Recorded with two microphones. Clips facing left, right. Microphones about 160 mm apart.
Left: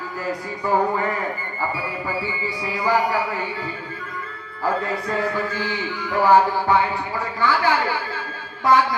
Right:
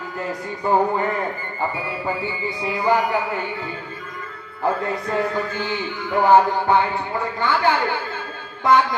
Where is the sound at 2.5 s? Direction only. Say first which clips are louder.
Right 3 dB; 20° right (ahead or behind).